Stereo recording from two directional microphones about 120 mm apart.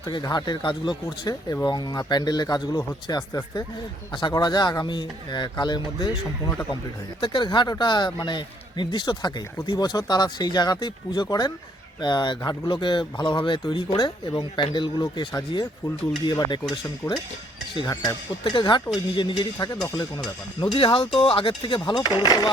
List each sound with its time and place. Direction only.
0.0 s a man's voice: 35° left (ahead or behind)
17.0 s cutlery: 20° left (ahead or behind)
17.7 s a man's voice: 35° left (ahead or behind)
19.5 s a man's voice: 30° left (ahead or behind)
20.7 s a man's voice: 50° left (ahead or behind); by 22.4 s 35° left (ahead or behind)